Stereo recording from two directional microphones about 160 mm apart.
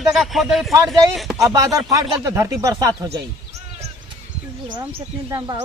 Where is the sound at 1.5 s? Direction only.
20° right (ahead or behind).